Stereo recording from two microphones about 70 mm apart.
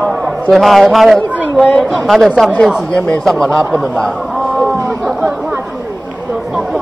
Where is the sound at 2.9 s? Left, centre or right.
Centre.